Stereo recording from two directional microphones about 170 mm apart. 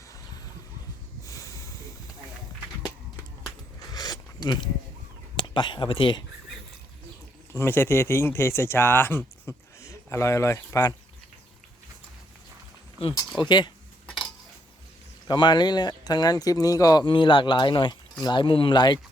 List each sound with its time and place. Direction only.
1.2 s a sound: 20° left (ahead or behind)
3.9 s a sound: 20° left (ahead or behind)
5.4 s speech: 30° left (ahead or behind)
7.5 s speech: 15° left (ahead or behind)
13.1 s speech: 25° left (ahead or behind)
15.3 s speech: 25° left (ahead or behind)